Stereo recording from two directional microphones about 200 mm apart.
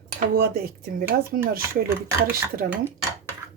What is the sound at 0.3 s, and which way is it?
Speech, 50° right (ahead or behind).